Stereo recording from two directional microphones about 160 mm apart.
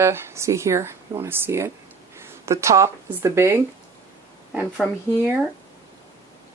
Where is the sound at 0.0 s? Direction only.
15° right (ahead or behind).